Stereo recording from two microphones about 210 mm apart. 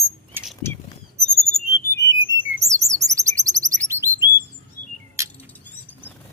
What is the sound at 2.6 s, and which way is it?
Chirp, 15° right (ahead or behind).